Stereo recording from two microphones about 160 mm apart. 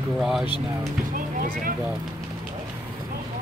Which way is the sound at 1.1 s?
60° right (ahead or behind).